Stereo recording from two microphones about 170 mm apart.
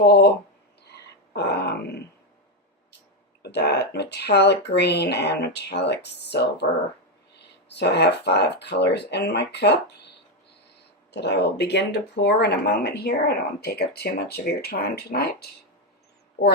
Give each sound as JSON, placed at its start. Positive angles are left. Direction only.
{"t": 0.0, "sound": "speech", "side_deg": 75}
{"t": 0.9, "sound": "a sound", "side_deg": 75}
{"t": 3.4, "sound": "speech", "side_deg": 75}
{"t": 7.7, "sound": "speech", "side_deg": 80}
{"t": 11.1, "sound": "speech", "side_deg": 85}